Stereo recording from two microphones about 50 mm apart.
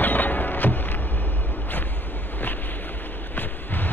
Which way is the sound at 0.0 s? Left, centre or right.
Left.